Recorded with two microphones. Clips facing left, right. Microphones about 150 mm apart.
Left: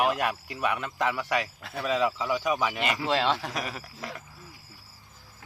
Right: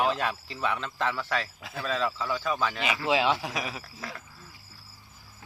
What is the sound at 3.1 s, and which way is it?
Speech, 5° right (ahead or behind).